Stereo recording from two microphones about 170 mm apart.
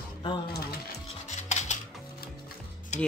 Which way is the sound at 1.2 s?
45° left (ahead or behind).